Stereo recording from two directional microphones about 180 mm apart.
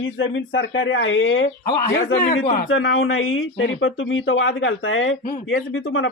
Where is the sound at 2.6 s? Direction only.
90° left.